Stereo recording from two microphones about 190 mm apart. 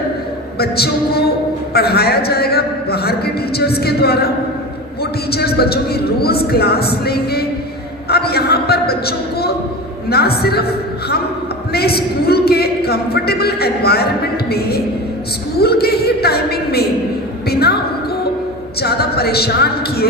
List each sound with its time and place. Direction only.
0.6 s a woman's voice: 55° left (ahead or behind)
5.3 s a woman's voice: 55° left (ahead or behind)
18.8 s a woman's voice: 55° left (ahead or behind)